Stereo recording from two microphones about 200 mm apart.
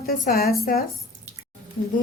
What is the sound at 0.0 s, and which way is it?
Speech, 50° left (ahead or behind).